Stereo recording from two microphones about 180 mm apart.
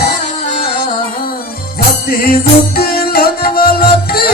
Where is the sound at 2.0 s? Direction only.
55° left (ahead or behind).